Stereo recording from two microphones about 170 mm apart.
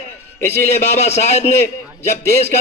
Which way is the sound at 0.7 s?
40° left (ahead or behind).